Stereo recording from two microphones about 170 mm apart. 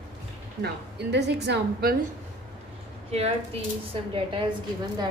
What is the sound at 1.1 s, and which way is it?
Speech, 85° right.